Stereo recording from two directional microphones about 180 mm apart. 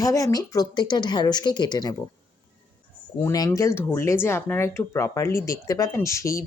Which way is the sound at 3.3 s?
20° left (ahead or behind).